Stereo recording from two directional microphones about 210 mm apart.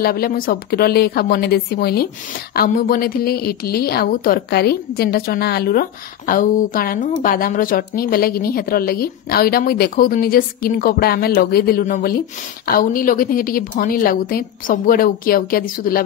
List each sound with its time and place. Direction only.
0.0 s a woman's voice: 45° left (ahead or behind)